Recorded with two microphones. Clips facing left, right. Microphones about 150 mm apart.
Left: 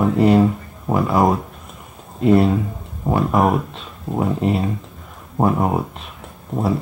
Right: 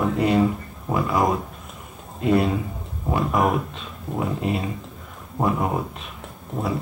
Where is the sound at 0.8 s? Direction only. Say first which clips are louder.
Left 5 dB; 30° left (ahead or behind).